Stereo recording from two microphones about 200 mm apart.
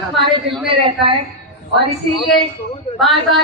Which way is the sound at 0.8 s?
25° right (ahead or behind).